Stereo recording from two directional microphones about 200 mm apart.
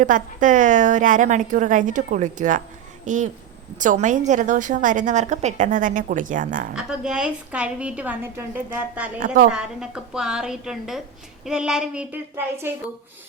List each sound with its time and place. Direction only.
0.0 s a woman's voice: 40° right (ahead or behind)
6.7 s a woman's voice: 5° right (ahead or behind)
9.2 s a woman's voice: 40° right (ahead or behind)
9.5 s a woman's voice: 5° right (ahead or behind)